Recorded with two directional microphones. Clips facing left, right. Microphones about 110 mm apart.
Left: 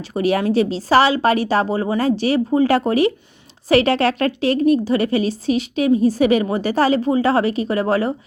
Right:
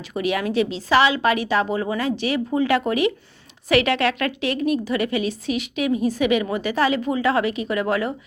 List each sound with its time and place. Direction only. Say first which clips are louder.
0.1 s a woman's voice: left 5 dB; 35° left (ahead or behind)